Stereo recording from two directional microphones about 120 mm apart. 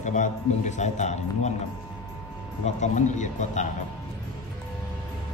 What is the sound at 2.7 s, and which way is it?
Speech, 80° left.